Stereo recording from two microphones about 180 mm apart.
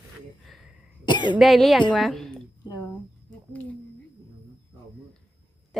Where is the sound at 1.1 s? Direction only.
25° left (ahead or behind).